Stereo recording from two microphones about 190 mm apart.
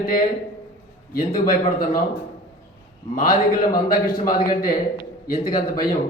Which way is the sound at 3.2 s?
45° left (ahead or behind).